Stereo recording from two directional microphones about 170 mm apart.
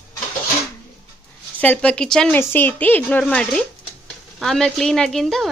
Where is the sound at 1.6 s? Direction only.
10° left (ahead or behind).